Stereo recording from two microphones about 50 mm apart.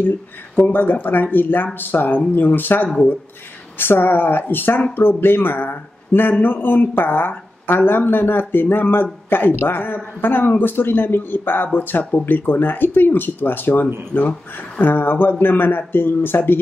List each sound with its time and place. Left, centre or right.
0.6 s speech: left